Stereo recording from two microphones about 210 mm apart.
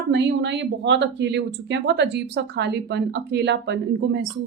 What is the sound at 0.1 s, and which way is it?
A woman's voice, 55° right (ahead or behind).